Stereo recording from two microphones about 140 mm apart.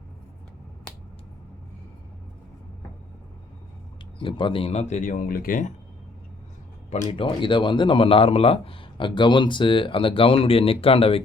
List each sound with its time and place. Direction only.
4.2 s speech: 35° left (ahead or behind); by 5.7 s 75° left (ahead or behind)
7.1 s speech: 40° left (ahead or behind)